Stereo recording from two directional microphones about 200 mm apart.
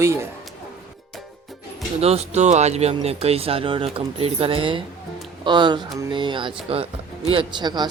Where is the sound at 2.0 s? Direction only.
30° right (ahead or behind).